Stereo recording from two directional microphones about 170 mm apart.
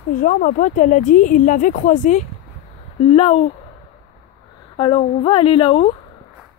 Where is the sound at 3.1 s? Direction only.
35° left (ahead or behind).